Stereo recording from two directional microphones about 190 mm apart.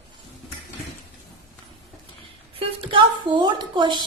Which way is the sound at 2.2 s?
30° right (ahead or behind).